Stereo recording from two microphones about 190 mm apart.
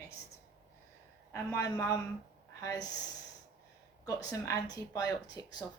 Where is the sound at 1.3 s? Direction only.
15° left (ahead or behind).